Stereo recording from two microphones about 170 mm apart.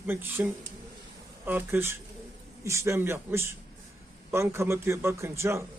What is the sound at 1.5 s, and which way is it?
A man's voice, 10° right (ahead or behind).